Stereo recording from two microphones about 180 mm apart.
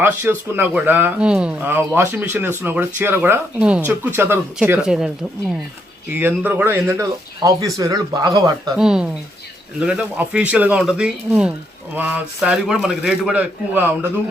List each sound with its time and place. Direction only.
0.0 s speech: 10° right (ahead or behind)
8.8 s a man's voice: 5° right (ahead or behind)